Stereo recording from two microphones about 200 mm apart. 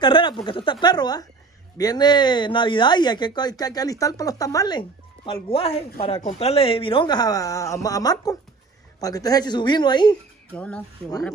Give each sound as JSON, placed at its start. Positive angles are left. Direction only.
{"t": 0.0, "sound": "speech", "side_deg": 25}
{"t": 10.5, "sound": "speech", "side_deg": 5}